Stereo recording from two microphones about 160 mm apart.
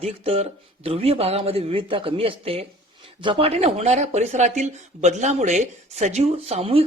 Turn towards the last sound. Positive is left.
turn(degrees=-40)  # may be behind; listen again after turning